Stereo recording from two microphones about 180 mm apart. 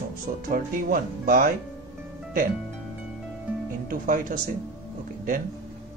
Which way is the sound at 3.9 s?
50° right (ahead or behind).